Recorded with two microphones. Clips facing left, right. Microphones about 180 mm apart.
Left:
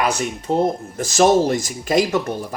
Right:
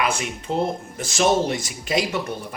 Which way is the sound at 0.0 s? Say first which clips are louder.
Left 3 dB; 40° left (ahead or behind).